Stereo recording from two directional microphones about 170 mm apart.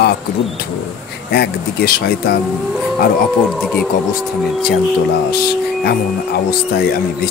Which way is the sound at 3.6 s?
5° left (ahead or behind).